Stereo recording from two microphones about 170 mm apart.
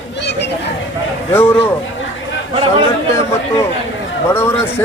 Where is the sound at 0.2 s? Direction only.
85° left.